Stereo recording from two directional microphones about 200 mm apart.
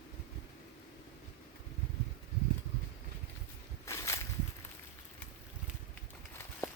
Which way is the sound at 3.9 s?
15° left (ahead or behind).